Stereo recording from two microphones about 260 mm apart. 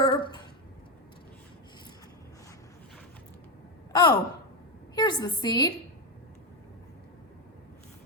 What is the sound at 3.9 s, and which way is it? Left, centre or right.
Sigh, centre.